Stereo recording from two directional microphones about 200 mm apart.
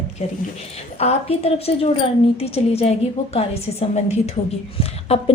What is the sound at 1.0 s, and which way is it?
A woman's voice, 30° left (ahead or behind).